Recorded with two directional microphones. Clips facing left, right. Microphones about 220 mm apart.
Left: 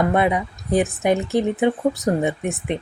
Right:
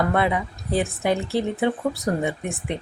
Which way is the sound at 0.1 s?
20° left (ahead or behind).